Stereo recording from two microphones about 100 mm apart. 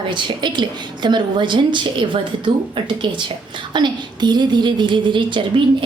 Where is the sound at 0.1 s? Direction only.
50° right (ahead or behind).